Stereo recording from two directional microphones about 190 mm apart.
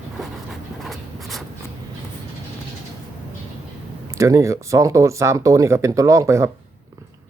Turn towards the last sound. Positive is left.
turn(degrees=-15)  # may be behind; listen again after turning